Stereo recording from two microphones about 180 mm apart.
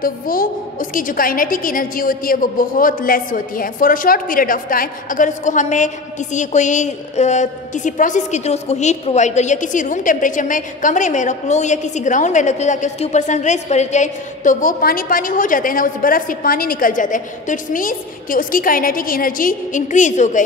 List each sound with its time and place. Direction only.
0.0 s a woman's voice: 50° left (ahead or behind)